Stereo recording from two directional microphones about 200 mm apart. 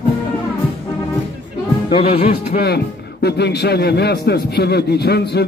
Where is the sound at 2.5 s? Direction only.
55° left (ahead or behind).